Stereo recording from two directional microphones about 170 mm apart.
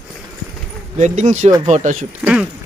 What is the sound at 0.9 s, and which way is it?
Speech, 45° right (ahead or behind).